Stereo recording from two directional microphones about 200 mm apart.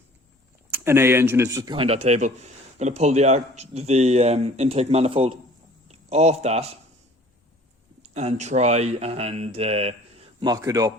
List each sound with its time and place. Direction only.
0.7 s speech: 10° right (ahead or behind); by 6.7 s 30° right (ahead or behind)
8.1 s speech: 35° right (ahead or behind)
10.5 s speech: 15° right (ahead or behind)